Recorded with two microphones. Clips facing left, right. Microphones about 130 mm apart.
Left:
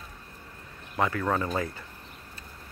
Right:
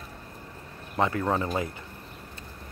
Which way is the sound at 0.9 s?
25° right (ahead or behind).